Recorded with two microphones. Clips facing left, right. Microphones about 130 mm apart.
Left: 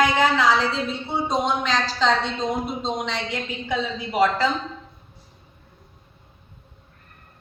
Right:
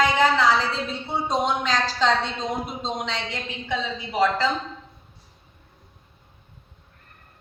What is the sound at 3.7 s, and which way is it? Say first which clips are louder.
Speech: left 2 dB; 5° left (ahead or behind).